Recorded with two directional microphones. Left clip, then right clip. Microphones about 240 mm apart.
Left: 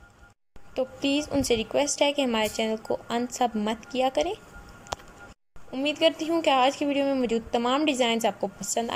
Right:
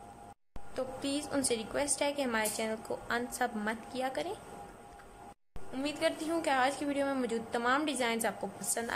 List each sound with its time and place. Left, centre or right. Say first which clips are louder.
0.7 s a woman's voice: left 9 dB; centre
5.7 s a woman's voice: left 9 dB; centre